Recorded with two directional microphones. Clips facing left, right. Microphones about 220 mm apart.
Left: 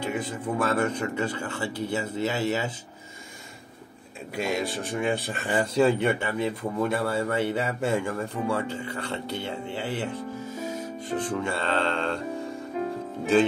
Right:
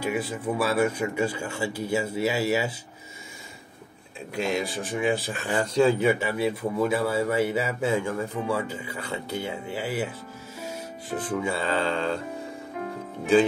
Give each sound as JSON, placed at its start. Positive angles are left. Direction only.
{"t": 0.0, "sound": "speech", "side_deg": -10}
{"t": 4.4, "sound": "speech", "side_deg": 0}